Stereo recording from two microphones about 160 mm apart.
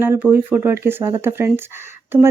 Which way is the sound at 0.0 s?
15° right (ahead or behind).